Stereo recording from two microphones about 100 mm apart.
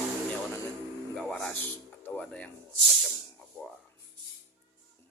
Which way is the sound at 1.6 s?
20° left (ahead or behind).